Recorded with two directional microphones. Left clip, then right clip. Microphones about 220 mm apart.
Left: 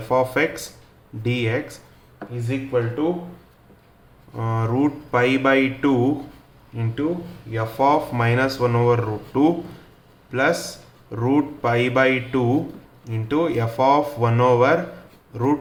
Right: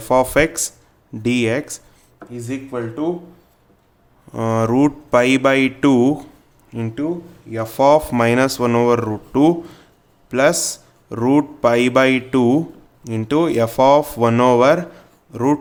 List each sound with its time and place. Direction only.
0.1 s a man's voice: 55° right (ahead or behind)
4.4 s a man's voice: 55° right (ahead or behind)